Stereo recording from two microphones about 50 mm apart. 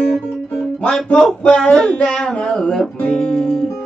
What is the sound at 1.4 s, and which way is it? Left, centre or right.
Music, centre.